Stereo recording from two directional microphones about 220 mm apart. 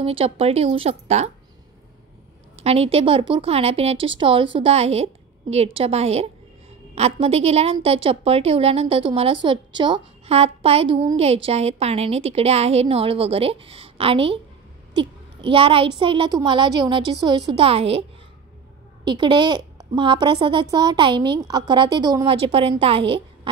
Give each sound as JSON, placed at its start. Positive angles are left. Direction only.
{"t": 0.0, "sound": "a woman's voice", "side_deg": -25}
{"t": 2.5, "sound": "a woman's voice", "side_deg": -30}
{"t": 19.0, "sound": "a woman's voice", "side_deg": -20}